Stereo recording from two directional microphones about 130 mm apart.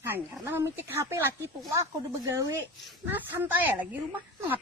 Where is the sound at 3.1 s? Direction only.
15° right (ahead or behind).